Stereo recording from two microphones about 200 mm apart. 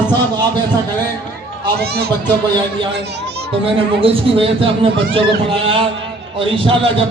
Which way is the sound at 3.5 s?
25° right (ahead or behind).